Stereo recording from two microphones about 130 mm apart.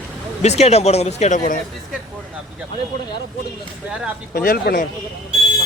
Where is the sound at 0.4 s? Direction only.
55° left (ahead or behind); by 1.5 s 70° left (ahead or behind).